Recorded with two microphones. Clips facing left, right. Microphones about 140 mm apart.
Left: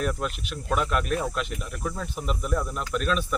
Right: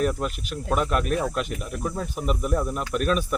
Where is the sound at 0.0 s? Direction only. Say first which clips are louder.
Right 3 dB; 40° right (ahead or behind).